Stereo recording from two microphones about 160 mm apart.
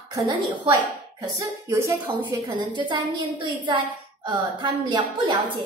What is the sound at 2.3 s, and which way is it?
Speech, 30° right (ahead or behind).